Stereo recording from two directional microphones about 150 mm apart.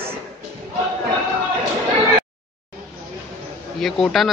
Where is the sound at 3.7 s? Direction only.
Centre (ahead or behind).